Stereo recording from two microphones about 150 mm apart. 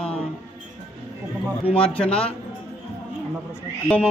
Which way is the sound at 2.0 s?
5° left (ahead or behind).